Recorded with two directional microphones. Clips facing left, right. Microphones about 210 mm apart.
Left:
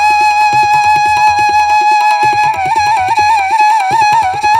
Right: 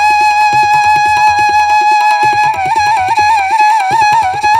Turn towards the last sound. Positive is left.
turn(degrees=0)  # may be behind; listen again after turning